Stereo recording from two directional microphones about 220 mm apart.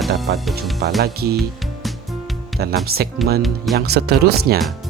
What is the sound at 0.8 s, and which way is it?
Speech, 45° right (ahead or behind).